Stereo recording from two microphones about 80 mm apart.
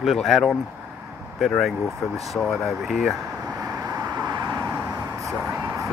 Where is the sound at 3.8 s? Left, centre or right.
Right.